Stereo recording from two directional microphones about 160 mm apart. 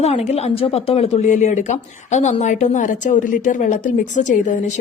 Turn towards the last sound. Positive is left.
turn(degrees=50)  # may be behind; listen again after turning